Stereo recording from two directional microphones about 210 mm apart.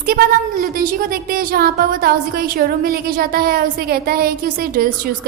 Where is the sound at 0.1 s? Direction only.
45° right (ahead or behind).